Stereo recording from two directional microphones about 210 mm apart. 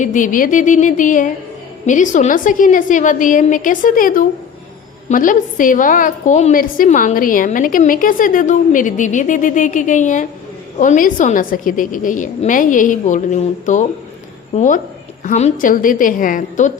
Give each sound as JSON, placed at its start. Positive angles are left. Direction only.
{"t": 0.0, "sound": "a woman's voice", "side_deg": 35}